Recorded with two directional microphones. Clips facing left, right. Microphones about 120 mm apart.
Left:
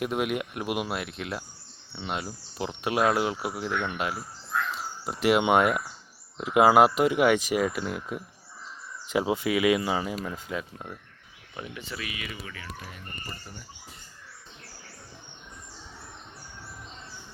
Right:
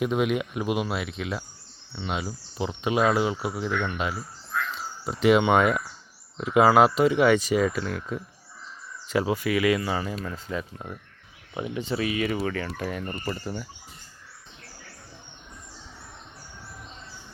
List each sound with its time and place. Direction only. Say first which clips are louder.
0.0 s speech: right 3 dB; 5° left (ahead or behind)
11.5 s speech: right 9 dB; 20° right (ahead or behind)
12.3 s speech: right 12 dB; 55° right (ahead or behind); by 13.7 s 90° right